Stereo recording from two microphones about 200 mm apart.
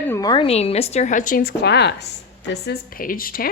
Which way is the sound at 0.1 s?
20° left (ahead or behind).